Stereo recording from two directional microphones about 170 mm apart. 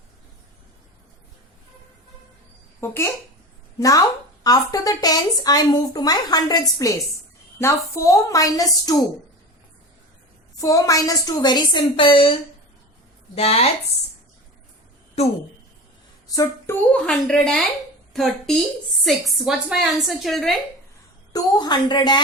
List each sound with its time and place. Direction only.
2.8 s speech: 15° left (ahead or behind)
10.6 s a woman's voice: 20° left (ahead or behind); by 13.7 s 35° left (ahead or behind)
16.3 s speech: 20° left (ahead or behind)
16.9 s a woman's voice: 5° left (ahead or behind)
21.3 s speech: 25° left (ahead or behind)